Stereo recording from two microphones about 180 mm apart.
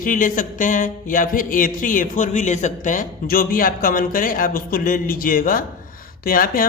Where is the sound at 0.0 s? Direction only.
50° left (ahead or behind).